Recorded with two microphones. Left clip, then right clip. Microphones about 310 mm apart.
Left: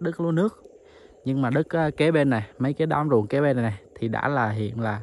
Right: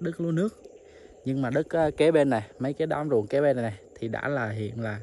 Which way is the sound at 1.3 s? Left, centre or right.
Centre.